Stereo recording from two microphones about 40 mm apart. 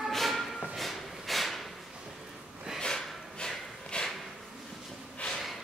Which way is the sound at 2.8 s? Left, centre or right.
Left.